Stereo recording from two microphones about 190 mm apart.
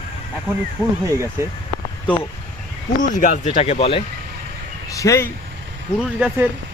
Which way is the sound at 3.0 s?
40° left (ahead or behind).